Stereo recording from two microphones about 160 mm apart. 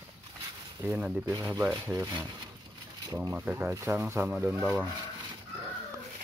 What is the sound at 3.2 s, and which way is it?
Speech, 10° right (ahead or behind).